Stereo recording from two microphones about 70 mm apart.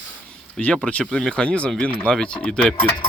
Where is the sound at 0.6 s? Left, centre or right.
Centre.